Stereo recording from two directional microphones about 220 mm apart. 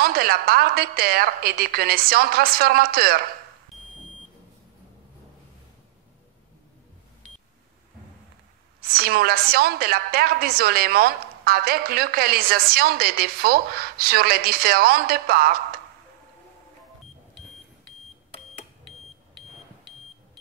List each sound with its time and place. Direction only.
0.0 s a woman's voice: 45° right (ahead or behind)
8.8 s a woman's voice: 45° right (ahead or behind)